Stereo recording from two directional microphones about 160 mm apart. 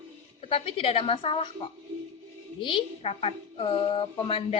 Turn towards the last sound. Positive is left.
turn(degrees=35)  # may be behind; listen again after turning